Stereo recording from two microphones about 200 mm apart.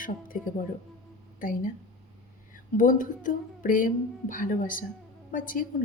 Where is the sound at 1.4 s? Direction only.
45° left (ahead or behind).